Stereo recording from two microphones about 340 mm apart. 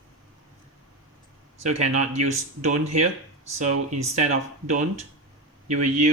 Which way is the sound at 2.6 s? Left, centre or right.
Centre.